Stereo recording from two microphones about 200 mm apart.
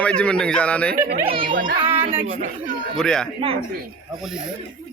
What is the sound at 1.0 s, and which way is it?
Speech, 40° right (ahead or behind).